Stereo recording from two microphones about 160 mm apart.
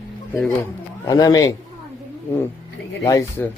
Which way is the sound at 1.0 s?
25° left (ahead or behind).